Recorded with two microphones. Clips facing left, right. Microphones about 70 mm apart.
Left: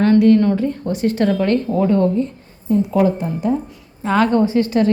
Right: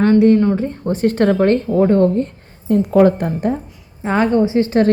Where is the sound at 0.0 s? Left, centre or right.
Right.